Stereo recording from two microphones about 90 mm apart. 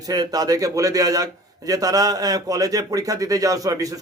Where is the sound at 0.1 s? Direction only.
45° right (ahead or behind).